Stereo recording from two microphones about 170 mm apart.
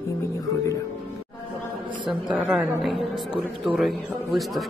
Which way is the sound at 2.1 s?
5° right (ahead or behind).